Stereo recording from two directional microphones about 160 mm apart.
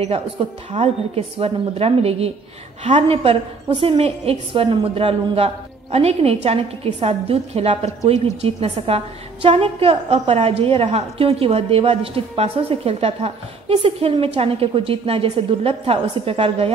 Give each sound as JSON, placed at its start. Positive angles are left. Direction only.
{"t": 0.7, "sound": "a woman's voice", "side_deg": -35}